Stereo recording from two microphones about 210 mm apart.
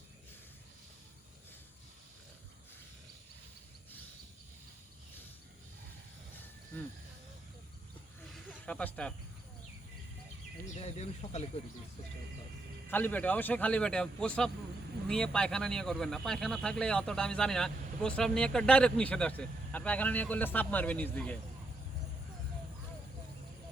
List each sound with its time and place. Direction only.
8.4 s speech: 5° left (ahead or behind)
10.8 s speech: 30° left (ahead or behind)
12.9 s speech: 10° left (ahead or behind)